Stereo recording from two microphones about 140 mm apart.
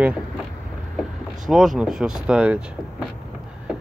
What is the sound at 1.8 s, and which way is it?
Speech, 5° right (ahead or behind).